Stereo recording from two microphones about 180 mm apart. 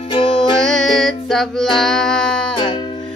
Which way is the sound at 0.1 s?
25° left (ahead or behind).